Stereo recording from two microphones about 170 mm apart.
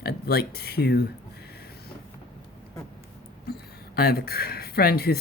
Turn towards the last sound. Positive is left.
turn(degrees=65)  # may be behind; listen again after turning